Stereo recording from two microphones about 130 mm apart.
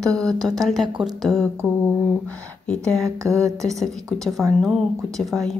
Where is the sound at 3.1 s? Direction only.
25° right (ahead or behind).